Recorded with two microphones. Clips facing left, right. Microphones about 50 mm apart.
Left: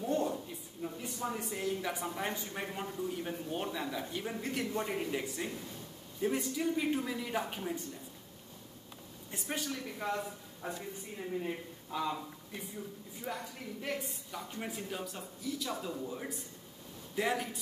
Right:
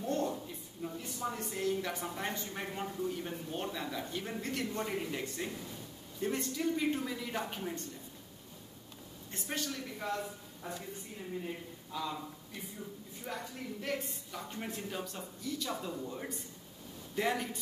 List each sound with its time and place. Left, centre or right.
0.0 s a sound: centre
0.8 s a woman's voice: centre
9.3 s speech: centre
11.4 s a man's voice: left
13.2 s a woman's voice: centre